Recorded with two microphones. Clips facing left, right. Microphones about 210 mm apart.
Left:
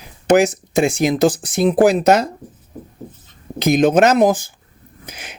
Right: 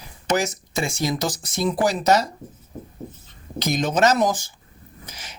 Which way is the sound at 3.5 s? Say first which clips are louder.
Left 9 dB; 55° left (ahead or behind).